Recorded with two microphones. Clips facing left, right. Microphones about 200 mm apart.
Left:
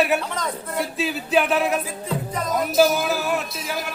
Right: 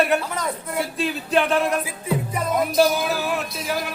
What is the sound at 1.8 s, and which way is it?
Music, 10° right (ahead or behind).